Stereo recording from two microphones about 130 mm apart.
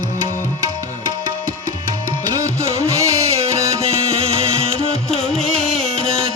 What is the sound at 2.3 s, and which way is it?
Music, 25° right (ahead or behind).